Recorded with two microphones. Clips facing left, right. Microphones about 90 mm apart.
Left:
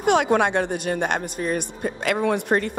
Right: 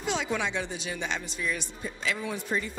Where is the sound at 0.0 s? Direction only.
60° left (ahead or behind).